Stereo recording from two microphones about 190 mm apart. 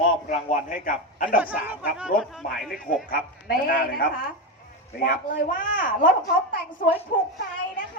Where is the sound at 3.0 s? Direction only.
50° left (ahead or behind).